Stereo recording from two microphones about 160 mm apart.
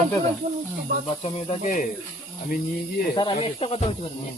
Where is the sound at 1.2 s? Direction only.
40° left (ahead or behind).